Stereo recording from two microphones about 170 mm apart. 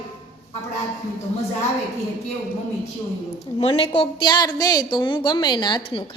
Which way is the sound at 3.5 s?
35° left (ahead or behind).